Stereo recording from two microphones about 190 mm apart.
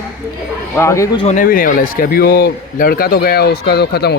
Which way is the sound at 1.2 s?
45° left (ahead or behind).